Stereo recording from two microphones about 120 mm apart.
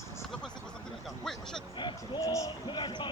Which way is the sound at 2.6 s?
40° left (ahead or behind).